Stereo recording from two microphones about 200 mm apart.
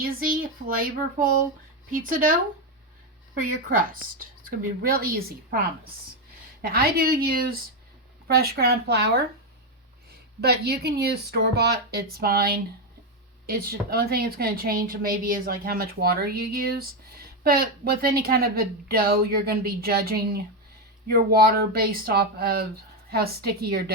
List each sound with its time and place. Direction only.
0.0 s a woman's voice: 45° right (ahead or behind)
4.4 s a woman's voice: 50° right (ahead or behind)
10.4 s a woman's voice: 55° right (ahead or behind)